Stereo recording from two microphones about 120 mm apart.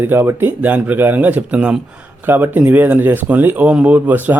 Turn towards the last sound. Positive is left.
turn(degrees=-15)  # may be behind; listen again after turning